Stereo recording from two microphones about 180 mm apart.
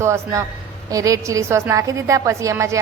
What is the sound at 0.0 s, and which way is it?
A woman's voice, 15° right (ahead or behind).